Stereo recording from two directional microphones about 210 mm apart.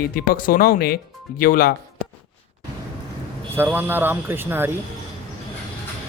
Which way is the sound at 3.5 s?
10° right (ahead or behind).